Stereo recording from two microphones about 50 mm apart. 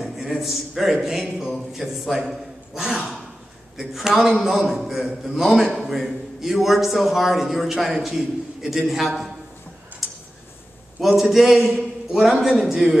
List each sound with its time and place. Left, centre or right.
0.0 s a sound: centre
1.4 s a man's voice: centre
11.0 s a man's voice: centre